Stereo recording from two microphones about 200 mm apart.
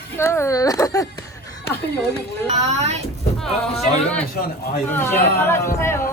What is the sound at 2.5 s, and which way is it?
Speech, 30° right (ahead or behind).